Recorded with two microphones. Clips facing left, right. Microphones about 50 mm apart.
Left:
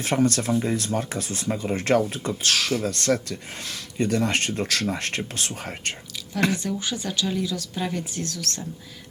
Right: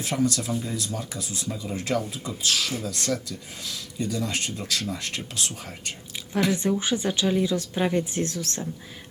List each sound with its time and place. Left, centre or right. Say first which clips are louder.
0.0 s speech: left 3 dB; left
6.6 s speech: right 4 dB; right